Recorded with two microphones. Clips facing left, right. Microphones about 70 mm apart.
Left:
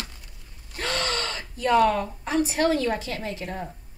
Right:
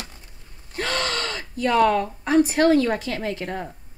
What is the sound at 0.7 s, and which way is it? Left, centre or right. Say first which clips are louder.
Speech: right 2 dB; right.